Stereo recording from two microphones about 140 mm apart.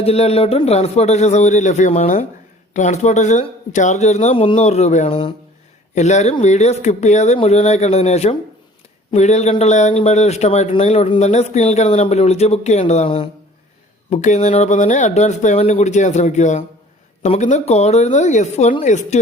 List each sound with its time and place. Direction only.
0.0 s speech: 50° left (ahead or behind)
4.4 s speech: 45° left (ahead or behind)
14.1 s speech: 55° left (ahead or behind)